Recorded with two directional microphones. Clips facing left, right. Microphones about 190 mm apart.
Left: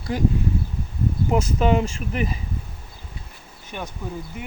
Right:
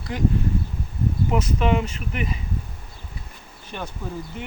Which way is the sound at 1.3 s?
35° left (ahead or behind).